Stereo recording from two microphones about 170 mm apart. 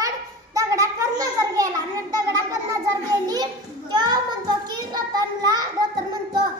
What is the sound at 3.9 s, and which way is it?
Child singing, 25° right (ahead or behind).